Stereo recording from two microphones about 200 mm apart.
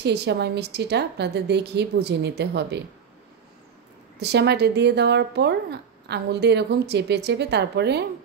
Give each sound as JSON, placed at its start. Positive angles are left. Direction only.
{"t": 0.0, "sound": "speech", "side_deg": -55}
{"t": 4.2, "sound": "speech", "side_deg": -55}